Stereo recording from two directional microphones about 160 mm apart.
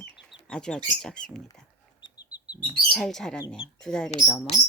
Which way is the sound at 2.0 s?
25° left (ahead or behind).